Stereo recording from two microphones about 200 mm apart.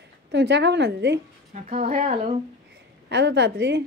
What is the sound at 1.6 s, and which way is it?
Speech, 35° right (ahead or behind).